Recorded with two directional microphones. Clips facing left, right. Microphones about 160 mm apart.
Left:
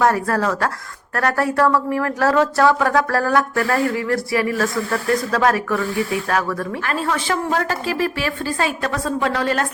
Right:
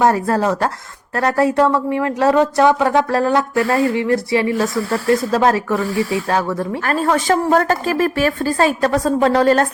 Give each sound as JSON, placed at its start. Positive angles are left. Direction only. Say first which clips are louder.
{"t": 0.0, "sound": "speech", "louder": "right 3 dB", "side_deg": -25}
{"t": 6.8, "sound": "a woman's voice", "louder": "right 6 dB", "side_deg": -45}